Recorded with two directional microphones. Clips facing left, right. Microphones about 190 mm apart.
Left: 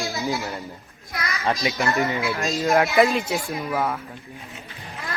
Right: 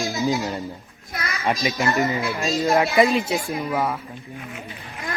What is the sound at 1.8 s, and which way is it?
Speech, 15° right (ahead or behind).